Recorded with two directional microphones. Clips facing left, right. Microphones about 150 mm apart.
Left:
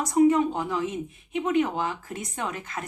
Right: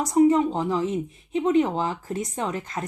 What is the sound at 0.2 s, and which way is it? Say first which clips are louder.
Speech: right 2 dB; 30° right (ahead or behind).